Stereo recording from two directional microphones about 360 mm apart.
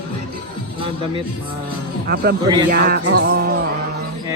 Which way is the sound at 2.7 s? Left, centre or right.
Right.